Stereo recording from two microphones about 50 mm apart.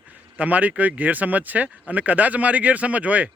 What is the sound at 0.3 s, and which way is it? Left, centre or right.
Speech, right.